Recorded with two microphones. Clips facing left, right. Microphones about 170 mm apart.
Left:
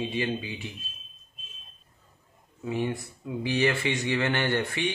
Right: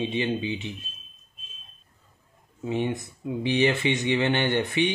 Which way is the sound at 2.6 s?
20° right (ahead or behind).